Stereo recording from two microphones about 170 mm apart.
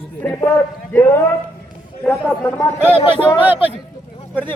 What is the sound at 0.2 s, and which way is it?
Speech, 10° left (ahead or behind).